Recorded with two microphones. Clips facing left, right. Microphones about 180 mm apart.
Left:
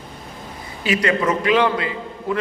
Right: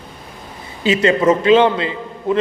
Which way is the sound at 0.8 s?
25° right (ahead or behind).